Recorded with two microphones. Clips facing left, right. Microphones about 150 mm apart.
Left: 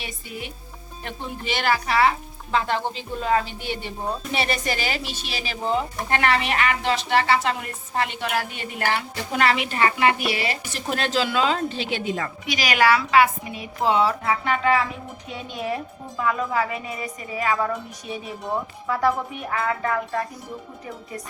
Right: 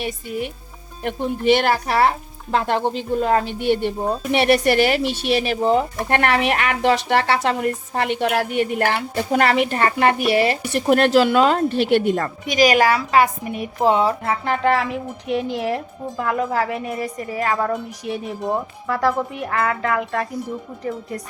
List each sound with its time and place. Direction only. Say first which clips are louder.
0.0 s a woman's voice: right 9 dB; 50° right (ahead or behind)
14.6 s a woman's voice: right 3 dB; 70° right (ahead or behind)
16.2 s speech: right 2 dB; 60° right (ahead or behind)
18.0 s speech: right 6 dB; 65° right (ahead or behind)
18.9 s a woman's voice: right 2 dB; 75° right (ahead or behind)